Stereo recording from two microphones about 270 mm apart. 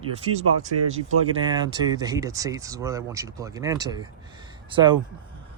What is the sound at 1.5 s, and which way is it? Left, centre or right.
Speech, centre.